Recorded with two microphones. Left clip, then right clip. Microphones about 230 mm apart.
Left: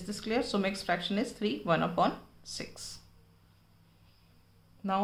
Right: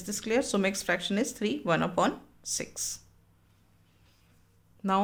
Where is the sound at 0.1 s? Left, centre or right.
Right.